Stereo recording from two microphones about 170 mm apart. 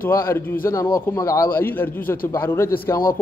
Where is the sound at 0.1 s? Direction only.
15° left (ahead or behind).